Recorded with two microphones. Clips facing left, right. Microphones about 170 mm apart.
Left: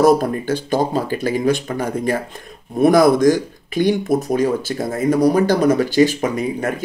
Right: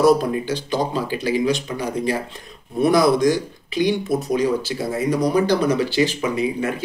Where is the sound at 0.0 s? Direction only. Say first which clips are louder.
Left 2 dB; 50° left (ahead or behind).